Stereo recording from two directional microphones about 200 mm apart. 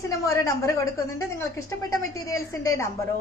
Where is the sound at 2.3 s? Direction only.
15° left (ahead or behind).